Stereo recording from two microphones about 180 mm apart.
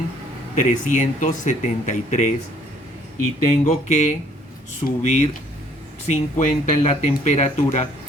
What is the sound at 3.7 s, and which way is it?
Speech, 40° left (ahead or behind).